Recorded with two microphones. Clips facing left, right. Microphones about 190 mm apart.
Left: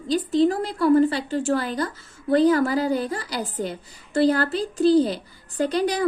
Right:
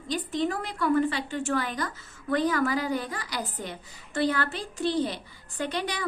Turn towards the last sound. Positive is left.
turn(degrees=35)  # may be behind; listen again after turning